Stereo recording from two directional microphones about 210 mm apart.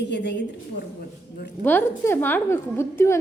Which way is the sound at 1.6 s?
10° left (ahead or behind).